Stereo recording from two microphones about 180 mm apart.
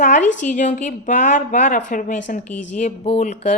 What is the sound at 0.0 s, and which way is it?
A woman's voice, 45° left (ahead or behind).